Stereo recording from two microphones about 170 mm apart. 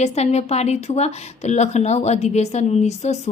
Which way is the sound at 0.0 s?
40° left (ahead or behind).